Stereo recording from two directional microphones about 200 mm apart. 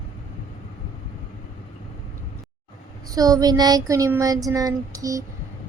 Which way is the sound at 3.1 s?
20° right (ahead or behind).